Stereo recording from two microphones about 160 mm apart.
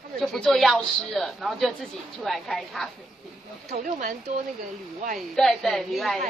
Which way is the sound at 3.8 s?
55° right (ahead or behind).